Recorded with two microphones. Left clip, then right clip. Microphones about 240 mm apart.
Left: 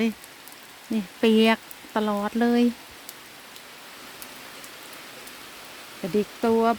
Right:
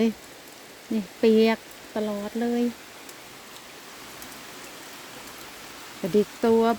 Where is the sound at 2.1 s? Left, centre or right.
Left.